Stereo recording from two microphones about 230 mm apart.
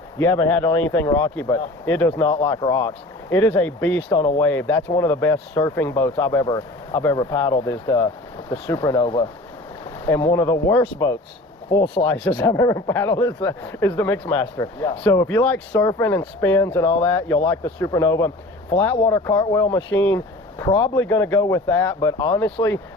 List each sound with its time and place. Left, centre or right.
0.3 s speech: centre
4.1 s speech: left
4.4 s speech: centre
10.3 s speech: centre
12.0 s speech: centre
20.7 s speech: left
21.0 s speech: centre